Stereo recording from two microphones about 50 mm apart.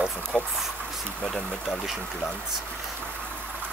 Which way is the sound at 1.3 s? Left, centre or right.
Centre.